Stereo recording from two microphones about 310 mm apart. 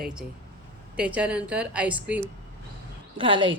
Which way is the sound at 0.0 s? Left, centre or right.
Centre.